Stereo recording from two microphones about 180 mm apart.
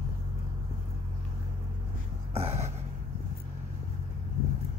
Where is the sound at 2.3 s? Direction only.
35° right (ahead or behind).